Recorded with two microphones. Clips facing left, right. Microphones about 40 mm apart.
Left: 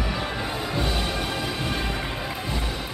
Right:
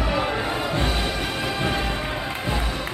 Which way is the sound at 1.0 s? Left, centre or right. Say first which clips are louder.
Right 2 dB; centre.